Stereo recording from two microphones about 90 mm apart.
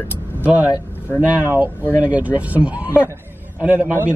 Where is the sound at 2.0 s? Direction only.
15° right (ahead or behind).